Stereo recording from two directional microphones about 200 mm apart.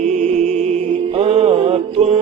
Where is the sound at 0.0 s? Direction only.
35° right (ahead or behind).